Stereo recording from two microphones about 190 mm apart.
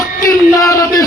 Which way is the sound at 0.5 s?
15° left (ahead or behind).